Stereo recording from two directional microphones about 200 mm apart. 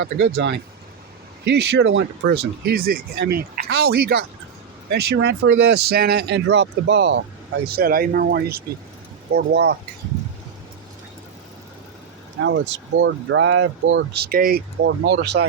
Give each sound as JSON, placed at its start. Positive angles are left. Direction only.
{"t": 0.0, "sound": "speech", "side_deg": -60}
{"t": 7.7, "sound": "speech", "side_deg": -50}
{"t": 12.4, "sound": "speech", "side_deg": -60}